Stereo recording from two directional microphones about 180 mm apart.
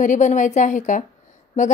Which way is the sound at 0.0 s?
45° left (ahead or behind).